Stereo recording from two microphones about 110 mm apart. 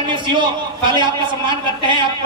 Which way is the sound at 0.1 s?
45° right (ahead or behind).